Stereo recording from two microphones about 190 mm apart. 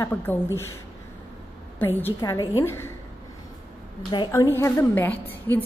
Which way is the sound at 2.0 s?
15° left (ahead or behind).